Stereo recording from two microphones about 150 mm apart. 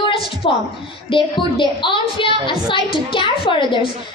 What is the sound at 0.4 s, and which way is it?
A child's voice, 35° left (ahead or behind).